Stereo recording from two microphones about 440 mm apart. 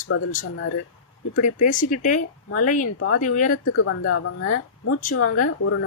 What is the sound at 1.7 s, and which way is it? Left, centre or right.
Speech, centre.